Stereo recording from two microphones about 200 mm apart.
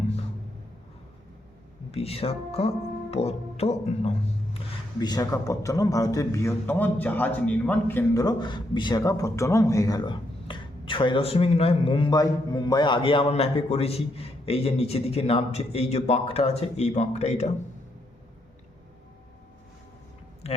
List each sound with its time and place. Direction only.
1.9 s speech: 30° left (ahead or behind)
4.9 s a man's voice: 20° left (ahead or behind)